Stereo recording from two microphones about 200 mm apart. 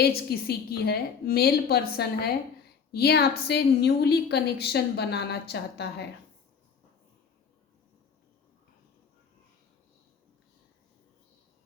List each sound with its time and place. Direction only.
0.0 s a woman's voice: 50° left (ahead or behind)